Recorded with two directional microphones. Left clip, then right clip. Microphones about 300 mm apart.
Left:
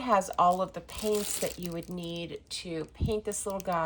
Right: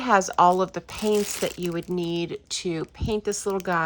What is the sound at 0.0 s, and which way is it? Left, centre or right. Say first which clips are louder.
Speech: right 6 dB; right.